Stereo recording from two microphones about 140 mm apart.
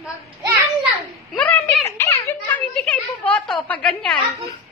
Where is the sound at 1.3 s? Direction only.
10° left (ahead or behind).